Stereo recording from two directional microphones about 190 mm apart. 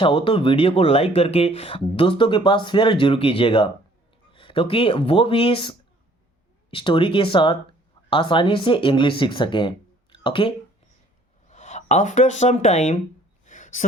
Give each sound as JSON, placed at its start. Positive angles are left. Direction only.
{"t": 0.0, "sound": "speech", "side_deg": 25}
{"t": 11.4, "sound": "speech", "side_deg": 40}
{"t": 13.4, "sound": "a sound", "side_deg": 40}